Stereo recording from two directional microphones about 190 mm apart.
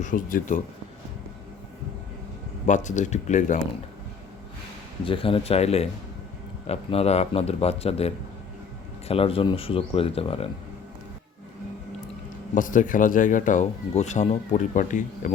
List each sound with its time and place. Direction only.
0.0 s speech: 45° left (ahead or behind)
2.6 s a man's voice: 40° left (ahead or behind)
5.0 s a man's voice: 30° left (ahead or behind)
12.5 s speech: 45° left (ahead or behind)